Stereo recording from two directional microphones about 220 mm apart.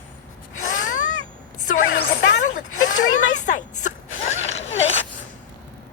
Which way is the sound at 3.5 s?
35° left (ahead or behind).